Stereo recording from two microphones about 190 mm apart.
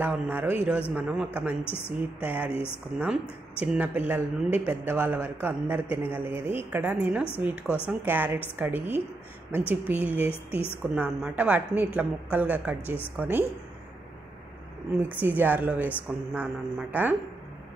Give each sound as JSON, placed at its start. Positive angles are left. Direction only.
{"t": 0.0, "sound": "speech", "side_deg": -10}
{"t": 1.7, "sound": "a woman's voice", "side_deg": 30}
{"t": 2.2, "sound": "speech", "side_deg": -10}
{"t": 7.6, "sound": "speech", "side_deg": 10}
{"t": 8.0, "sound": "speech", "side_deg": -10}
{"t": 15.0, "sound": "speech", "side_deg": -10}